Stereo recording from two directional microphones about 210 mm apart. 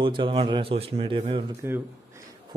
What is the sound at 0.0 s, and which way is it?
Speech, 25° right (ahead or behind).